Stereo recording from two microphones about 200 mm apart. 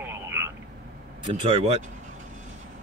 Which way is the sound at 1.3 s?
25° right (ahead or behind).